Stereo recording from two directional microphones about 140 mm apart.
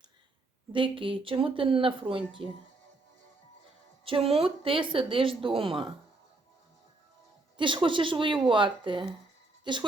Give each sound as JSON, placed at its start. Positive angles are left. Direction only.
{"t": 0.7, "sound": "speech", "side_deg": -35}
{"t": 4.0, "sound": "speech", "side_deg": -40}
{"t": 7.5, "sound": "speech", "side_deg": -35}